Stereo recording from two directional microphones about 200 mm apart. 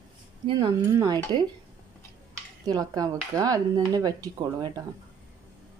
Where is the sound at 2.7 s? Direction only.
20° right (ahead or behind).